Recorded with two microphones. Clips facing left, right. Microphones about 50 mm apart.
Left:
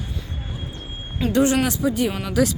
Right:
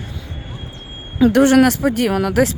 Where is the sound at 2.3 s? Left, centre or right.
Right.